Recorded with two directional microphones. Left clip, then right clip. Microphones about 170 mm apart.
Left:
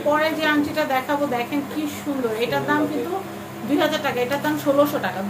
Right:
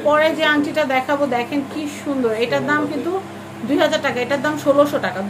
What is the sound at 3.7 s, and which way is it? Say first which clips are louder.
Speech: right 3 dB; 35° right (ahead or behind).